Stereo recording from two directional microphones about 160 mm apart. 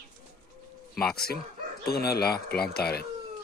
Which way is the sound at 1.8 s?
75° left (ahead or behind).